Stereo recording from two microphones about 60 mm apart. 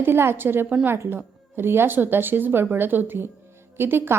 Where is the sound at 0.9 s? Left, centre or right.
Right.